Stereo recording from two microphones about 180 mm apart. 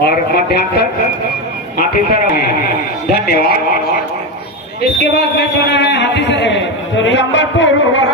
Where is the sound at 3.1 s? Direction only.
60° left (ahead or behind).